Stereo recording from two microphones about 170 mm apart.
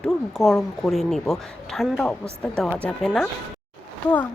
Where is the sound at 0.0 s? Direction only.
Centre (ahead or behind).